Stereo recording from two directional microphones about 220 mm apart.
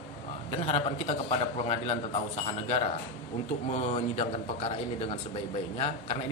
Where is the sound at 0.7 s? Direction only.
25° left (ahead or behind).